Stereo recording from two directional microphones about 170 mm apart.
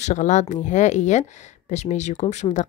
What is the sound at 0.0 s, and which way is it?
Speech, 45° left (ahead or behind).